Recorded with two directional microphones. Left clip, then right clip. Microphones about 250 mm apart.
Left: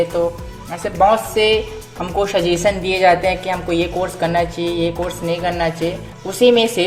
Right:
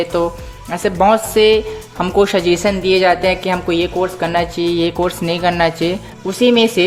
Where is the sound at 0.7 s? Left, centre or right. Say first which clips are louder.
Right 1 dB; right.